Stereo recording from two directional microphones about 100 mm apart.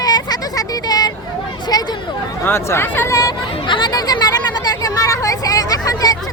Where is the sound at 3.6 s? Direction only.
50° left (ahead or behind).